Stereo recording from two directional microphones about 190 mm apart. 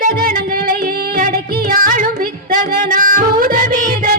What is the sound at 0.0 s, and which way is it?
Music, 50° right (ahead or behind).